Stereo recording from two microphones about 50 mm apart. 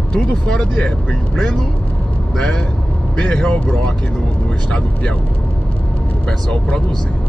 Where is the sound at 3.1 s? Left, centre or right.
Centre.